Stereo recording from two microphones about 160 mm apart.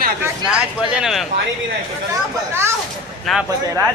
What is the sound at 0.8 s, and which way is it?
Speech, centre (ahead or behind).